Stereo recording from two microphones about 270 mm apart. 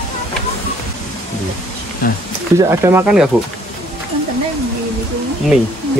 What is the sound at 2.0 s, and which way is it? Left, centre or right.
Speech, left.